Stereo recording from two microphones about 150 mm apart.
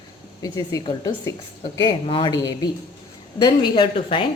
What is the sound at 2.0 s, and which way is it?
A woman's voice, 35° left (ahead or behind).